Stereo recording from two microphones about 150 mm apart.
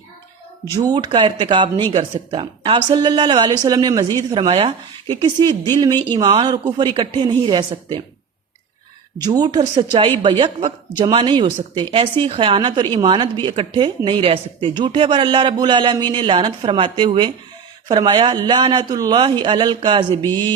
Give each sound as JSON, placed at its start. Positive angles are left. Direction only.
{"t": 0.6, "sound": "speech", "side_deg": -25}
{"t": 4.4, "sound": "speech", "side_deg": -40}
{"t": 5.4, "sound": "a woman's voice", "side_deg": -30}
{"t": 9.2, "sound": "a woman's voice", "side_deg": -25}